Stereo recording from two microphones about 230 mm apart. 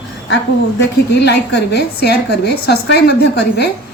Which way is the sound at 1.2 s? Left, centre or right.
Left.